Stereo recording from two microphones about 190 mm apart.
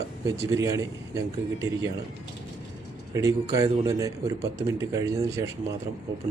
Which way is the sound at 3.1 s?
20° right (ahead or behind).